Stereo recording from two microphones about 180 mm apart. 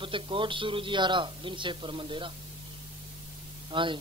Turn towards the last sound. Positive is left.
turn(degrees=-25)  # may be behind; listen again after turning